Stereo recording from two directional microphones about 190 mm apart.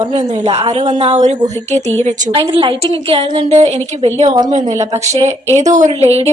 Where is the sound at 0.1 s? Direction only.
35° right (ahead or behind).